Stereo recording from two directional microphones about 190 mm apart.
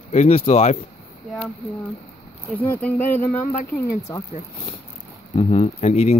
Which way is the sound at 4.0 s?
15° left (ahead or behind).